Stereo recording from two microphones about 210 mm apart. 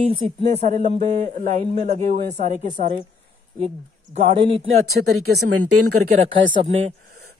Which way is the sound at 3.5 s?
25° right (ahead or behind).